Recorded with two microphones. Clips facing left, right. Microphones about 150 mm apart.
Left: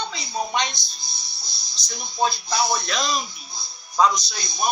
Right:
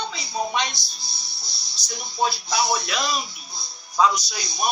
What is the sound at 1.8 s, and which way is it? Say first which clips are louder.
Speech: left 1 dB; 10° right (ahead or behind).